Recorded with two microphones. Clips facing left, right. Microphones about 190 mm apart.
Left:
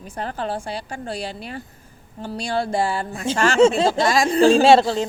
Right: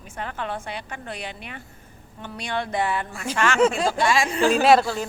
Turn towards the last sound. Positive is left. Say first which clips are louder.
# left 4 dB
turn(degrees=25)  # may be behind; listen again after turning